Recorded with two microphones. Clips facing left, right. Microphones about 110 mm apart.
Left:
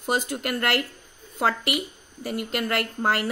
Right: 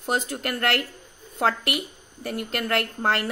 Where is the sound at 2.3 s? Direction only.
5° left (ahead or behind).